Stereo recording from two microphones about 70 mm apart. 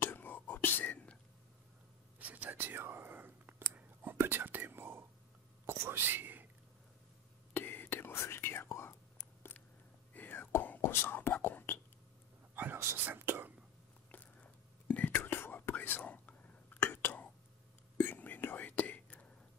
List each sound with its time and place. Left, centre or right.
0.0 s whispering: left
2.1 s whispering: right
7.5 s whispering: left
12.5 s a sound: right
14.1 s whispering: left